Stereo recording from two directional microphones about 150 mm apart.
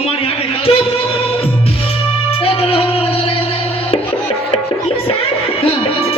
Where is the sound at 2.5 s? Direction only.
40° left (ahead or behind).